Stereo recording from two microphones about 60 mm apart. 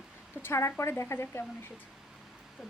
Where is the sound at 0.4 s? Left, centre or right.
Left.